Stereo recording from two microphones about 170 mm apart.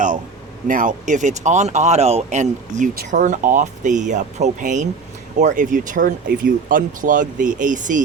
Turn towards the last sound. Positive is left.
turn(degrees=-50)  # may be behind; listen again after turning